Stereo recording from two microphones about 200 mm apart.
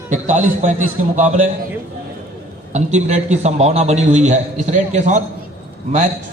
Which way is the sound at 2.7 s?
35° right (ahead or behind).